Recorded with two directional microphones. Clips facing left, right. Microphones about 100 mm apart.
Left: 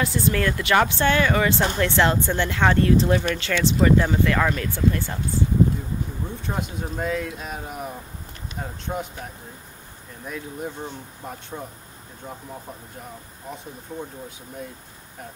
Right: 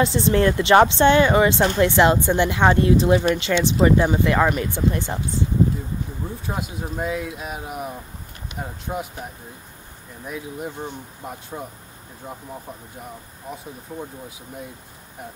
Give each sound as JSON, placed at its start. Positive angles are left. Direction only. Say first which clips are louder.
{"t": 0.0, "sound": "speech", "louder": "right 5 dB", "side_deg": -25}
{"t": 6.4, "sound": "speech", "louder": "left 1 dB", "side_deg": -5}
{"t": 13.9, "sound": "speech", "louder": "even", "side_deg": -10}